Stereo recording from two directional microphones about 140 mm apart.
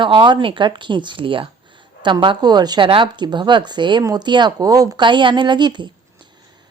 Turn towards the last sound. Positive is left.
turn(degrees=-30)  # may be behind; listen again after turning